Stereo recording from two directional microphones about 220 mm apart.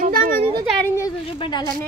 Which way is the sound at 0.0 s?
40° right (ahead or behind).